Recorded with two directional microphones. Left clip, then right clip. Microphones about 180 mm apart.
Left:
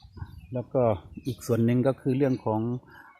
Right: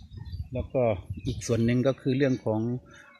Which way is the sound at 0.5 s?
20° left (ahead or behind).